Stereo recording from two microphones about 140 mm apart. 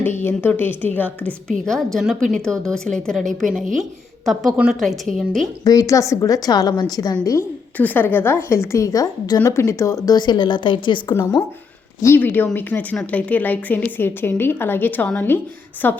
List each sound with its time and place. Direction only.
0.2 s a woman's voice: 15° left (ahead or behind)
4.3 s a woman's voice: 5° right (ahead or behind)
5.6 s a woman's voice: 25° left (ahead or behind)
7.3 s a woman's voice: 15° left (ahead or behind); by 11.0 s 35° left (ahead or behind)
11.1 s a woman's voice: 20° left (ahead or behind)